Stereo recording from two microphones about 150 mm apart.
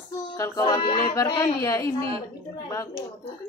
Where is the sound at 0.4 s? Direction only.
25° left (ahead or behind).